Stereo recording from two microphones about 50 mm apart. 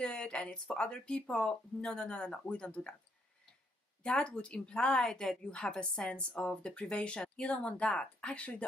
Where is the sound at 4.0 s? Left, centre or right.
Left.